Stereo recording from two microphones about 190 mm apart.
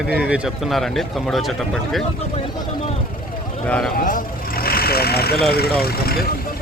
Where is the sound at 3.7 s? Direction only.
5° left (ahead or behind).